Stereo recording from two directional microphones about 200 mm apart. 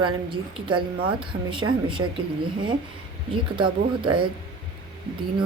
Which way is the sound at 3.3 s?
25° right (ahead or behind).